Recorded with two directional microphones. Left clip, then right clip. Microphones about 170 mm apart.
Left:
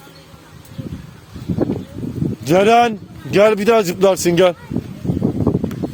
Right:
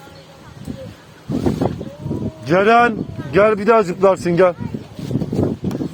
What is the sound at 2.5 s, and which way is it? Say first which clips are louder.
Speech: left 1 dB; 65° left (ahead or behind).